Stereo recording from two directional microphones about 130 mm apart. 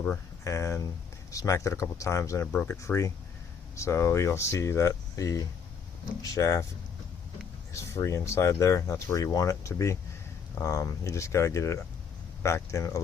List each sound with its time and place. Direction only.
0.4 s speech: 25° left (ahead or behind)
7.7 s speech: 20° left (ahead or behind)